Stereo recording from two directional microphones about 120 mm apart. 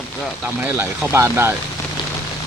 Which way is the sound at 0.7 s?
20° right (ahead or behind).